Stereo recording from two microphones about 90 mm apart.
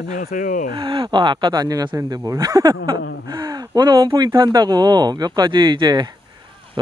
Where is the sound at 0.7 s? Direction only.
65° right (ahead or behind).